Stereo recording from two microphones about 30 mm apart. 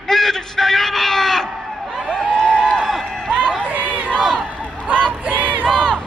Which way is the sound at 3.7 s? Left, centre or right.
Right.